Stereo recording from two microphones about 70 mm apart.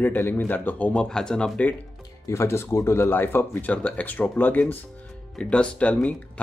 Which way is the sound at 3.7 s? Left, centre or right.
Left.